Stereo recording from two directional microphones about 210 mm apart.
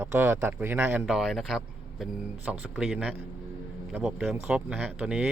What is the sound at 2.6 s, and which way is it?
Speech, 5° right (ahead or behind).